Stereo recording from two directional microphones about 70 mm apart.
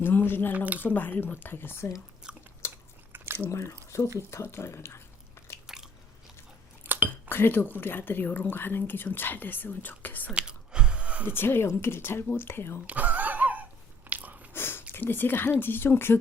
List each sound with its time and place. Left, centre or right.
0.0 s speech: left
0.5 s speech: right
0.8 s a woman's voice: left
2.3 s chewing: centre
2.6 s biting: left
3.5 s speech: left
5.6 s biting: centre
6.8 s a sound: right
7.3 s a woman's voice: left
10.3 s chewing: centre
11.3 s speech: left
12.9 s a sound: right
14.5 s a sound: left
15.6 s speech: left